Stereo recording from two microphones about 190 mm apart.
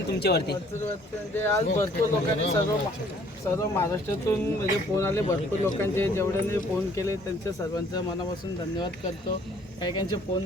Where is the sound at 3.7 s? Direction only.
15° left (ahead or behind).